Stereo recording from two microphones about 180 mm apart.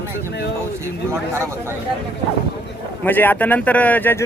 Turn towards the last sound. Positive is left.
turn(degrees=10)  # may be behind; listen again after turning